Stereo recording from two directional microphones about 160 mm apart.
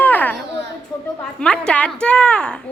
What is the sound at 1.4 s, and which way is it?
A woman's voice, 5° left (ahead or behind).